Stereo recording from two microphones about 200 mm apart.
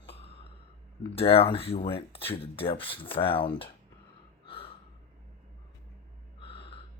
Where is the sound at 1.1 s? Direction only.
30° left (ahead or behind).